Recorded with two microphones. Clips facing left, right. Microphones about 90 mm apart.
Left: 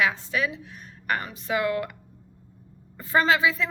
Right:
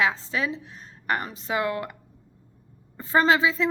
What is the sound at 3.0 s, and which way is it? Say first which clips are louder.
Speech: right 1 dB; 30° right (ahead or behind).